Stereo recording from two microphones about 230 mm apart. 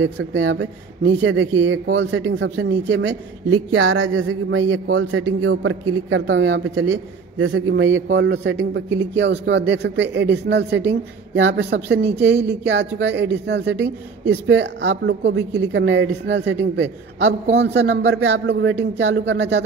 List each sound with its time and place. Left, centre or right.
0.0 s speech: right